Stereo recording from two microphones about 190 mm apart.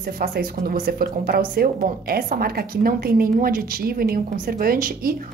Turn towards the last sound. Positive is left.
turn(degrees=-50)  # may be behind; listen again after turning